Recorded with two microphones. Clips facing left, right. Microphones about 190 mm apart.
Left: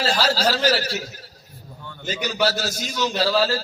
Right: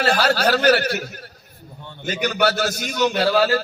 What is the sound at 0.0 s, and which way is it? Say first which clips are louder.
A man's voice: right 3 dB; 60° right (ahead or behind).